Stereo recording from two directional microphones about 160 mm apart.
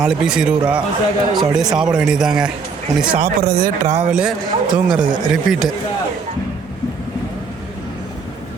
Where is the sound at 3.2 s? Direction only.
70° right (ahead or behind).